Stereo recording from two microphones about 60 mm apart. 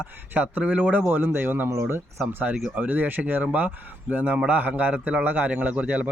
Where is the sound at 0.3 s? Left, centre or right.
Right.